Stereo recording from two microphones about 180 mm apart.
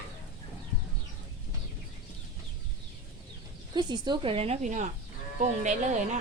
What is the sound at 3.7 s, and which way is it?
A woman's voice, 25° right (ahead or behind).